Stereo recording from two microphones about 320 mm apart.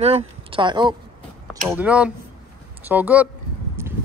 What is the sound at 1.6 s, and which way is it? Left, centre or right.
Speech, centre.